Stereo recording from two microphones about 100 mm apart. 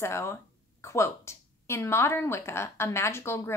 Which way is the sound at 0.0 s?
25° left (ahead or behind).